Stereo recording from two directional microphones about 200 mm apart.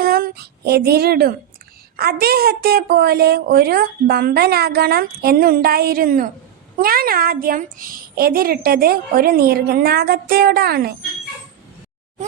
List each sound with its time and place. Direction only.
0.0 s a woman's voice: 50° right (ahead or behind)